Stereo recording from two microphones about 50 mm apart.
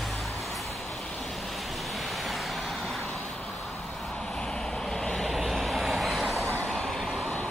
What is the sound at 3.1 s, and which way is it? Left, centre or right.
Vehicle, centre.